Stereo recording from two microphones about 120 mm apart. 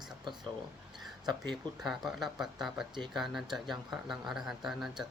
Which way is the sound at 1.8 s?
Centre (ahead or behind).